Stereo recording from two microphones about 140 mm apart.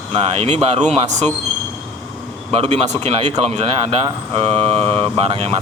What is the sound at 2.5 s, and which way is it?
Speech, 45° right (ahead or behind).